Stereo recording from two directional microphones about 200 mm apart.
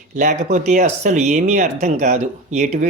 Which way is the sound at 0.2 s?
40° right (ahead or behind).